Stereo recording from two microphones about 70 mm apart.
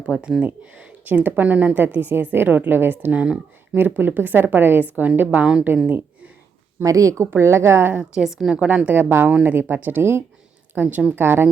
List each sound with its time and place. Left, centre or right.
0.0 s speech: centre
6.8 s speech: right
7.3 s a woman's voice: right
7.9 s a woman's voice: centre
8.6 s a woman's voice: centre; by 11.4 s right